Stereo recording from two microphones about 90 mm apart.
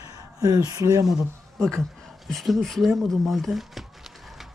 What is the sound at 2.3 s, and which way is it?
A man's voice, centre (ahead or behind).